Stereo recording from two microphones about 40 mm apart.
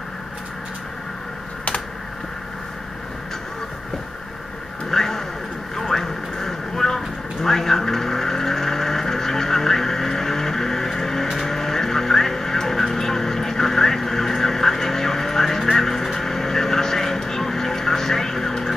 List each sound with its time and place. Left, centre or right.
4.9 s vehicle: centre